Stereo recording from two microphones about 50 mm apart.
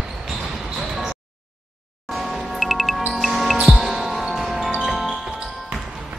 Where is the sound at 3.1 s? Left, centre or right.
Centre.